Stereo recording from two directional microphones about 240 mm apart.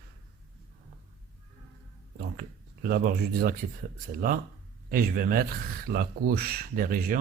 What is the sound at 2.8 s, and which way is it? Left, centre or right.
Speech, right.